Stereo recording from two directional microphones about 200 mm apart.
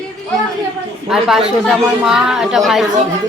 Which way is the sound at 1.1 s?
Centre (ahead or behind).